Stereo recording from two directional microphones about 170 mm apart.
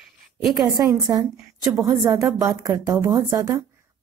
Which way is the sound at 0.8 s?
20° right (ahead or behind).